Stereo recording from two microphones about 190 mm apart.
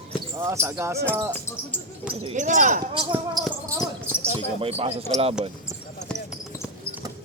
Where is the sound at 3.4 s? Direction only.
20° right (ahead or behind).